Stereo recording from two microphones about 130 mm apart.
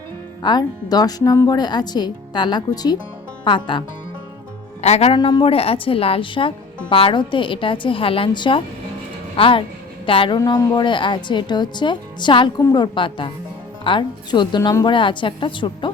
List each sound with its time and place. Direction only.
0.4 s a woman's voice: 30° left (ahead or behind)
4.8 s speech: 55° left (ahead or behind)
5.1 s a woman's voice: 40° left (ahead or behind)